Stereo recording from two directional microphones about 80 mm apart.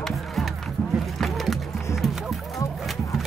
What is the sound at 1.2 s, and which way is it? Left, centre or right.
Music, centre.